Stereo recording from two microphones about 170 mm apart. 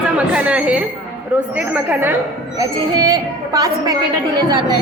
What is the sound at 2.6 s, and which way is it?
A woman's voice, 20° right (ahead or behind).